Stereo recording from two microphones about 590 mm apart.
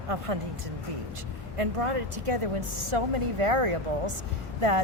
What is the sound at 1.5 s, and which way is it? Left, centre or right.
Speech, right.